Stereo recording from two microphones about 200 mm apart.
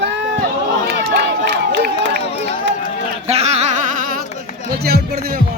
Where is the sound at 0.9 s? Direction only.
55° right (ahead or behind).